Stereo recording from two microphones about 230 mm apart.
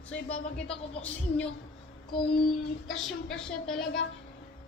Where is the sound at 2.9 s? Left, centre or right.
Centre.